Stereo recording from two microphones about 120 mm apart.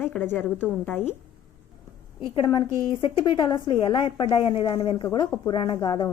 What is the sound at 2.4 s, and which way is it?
A woman's voice, 40° left (ahead or behind).